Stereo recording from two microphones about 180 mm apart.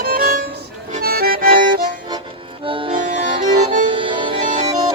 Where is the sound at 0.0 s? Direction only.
50° right (ahead or behind).